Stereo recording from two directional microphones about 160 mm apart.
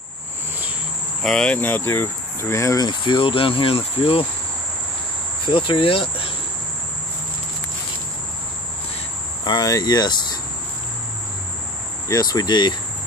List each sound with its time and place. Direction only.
1.2 s speech: 5° left (ahead or behind); by 4.3 s 35° left (ahead or behind)
5.5 s speech: 30° left (ahead or behind)
9.4 s speech: 25° left (ahead or behind)
12.1 s speech: 25° left (ahead or behind)